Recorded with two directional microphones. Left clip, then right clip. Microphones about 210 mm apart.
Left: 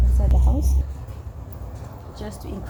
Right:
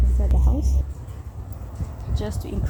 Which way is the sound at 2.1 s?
40° right (ahead or behind).